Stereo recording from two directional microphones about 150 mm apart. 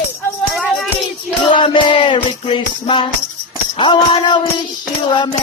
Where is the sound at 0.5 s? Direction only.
Centre (ahead or behind).